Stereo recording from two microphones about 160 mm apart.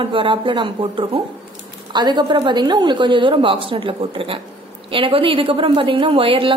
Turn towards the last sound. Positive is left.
turn(degrees=-35)  # may be behind; listen again after turning